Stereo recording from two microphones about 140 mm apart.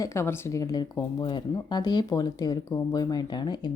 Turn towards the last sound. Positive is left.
turn(degrees=30)  # may be behind; listen again after turning